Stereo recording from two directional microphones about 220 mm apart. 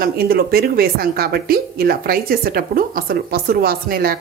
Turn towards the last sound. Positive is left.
turn(degrees=-45)  # may be behind; listen again after turning